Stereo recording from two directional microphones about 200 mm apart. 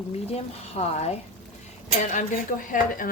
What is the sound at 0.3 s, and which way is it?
Speech, 30° left (ahead or behind).